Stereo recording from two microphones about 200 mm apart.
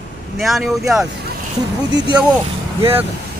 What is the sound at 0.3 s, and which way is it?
Speech, centre (ahead or behind).